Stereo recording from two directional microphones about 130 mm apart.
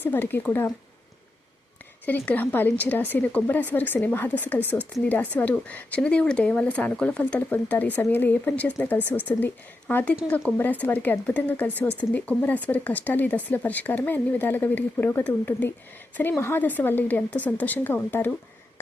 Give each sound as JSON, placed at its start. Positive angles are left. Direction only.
{"t": 0.0, "sound": "a woman's voice", "side_deg": 15}
{"t": 2.0, "sound": "a woman's voice", "side_deg": 10}